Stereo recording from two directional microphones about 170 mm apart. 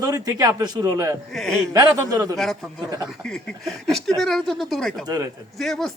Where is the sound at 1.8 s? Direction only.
20° right (ahead or behind).